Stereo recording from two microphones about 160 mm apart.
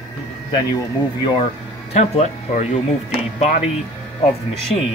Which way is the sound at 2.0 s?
45° left (ahead or behind).